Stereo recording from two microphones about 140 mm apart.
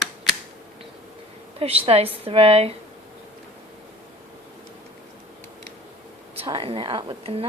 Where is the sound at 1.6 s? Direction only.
45° right (ahead or behind).